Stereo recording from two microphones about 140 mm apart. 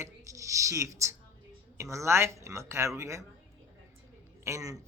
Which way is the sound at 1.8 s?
20° right (ahead or behind).